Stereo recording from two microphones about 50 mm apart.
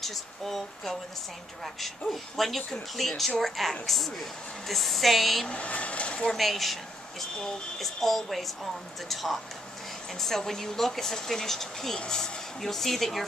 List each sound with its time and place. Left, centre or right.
0.0 s speech: centre
2.3 s speech: centre
5.5 s speech: left
6.3 s speech: centre